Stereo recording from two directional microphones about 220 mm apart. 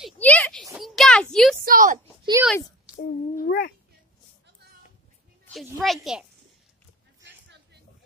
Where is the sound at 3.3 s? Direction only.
45° left (ahead or behind).